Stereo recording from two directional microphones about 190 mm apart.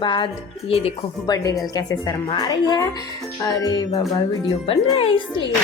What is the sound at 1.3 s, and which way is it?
Speech, 20° left (ahead or behind).